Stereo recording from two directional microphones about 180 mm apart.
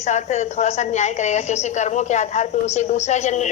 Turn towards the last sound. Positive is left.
turn(degrees=40)  # may be behind; listen again after turning